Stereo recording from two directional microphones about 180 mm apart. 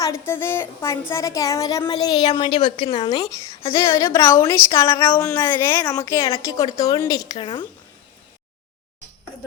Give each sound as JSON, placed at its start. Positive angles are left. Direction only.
{"t": 0.0, "sound": "a woman's voice", "side_deg": 15}